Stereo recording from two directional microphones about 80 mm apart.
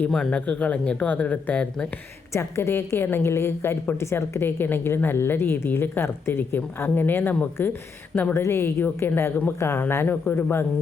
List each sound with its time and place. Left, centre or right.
0.1 s speech: centre
2.3 s a woman's voice: left
8.3 s a woman's voice: left